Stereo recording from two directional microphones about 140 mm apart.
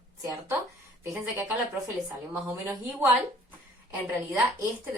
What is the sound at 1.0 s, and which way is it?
Speech, 20° right (ahead or behind).